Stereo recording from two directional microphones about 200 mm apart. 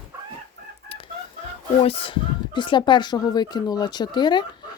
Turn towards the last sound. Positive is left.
turn(degrees=20)  # may be behind; listen again after turning